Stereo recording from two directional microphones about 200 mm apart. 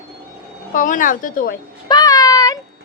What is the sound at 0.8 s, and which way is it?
Speech, 40° left (ahead or behind).